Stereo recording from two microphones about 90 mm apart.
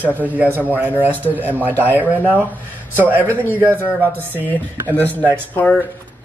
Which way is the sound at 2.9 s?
20° right (ahead or behind).